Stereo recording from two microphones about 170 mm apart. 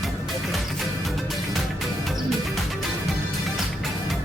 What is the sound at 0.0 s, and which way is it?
Music, centre (ahead or behind).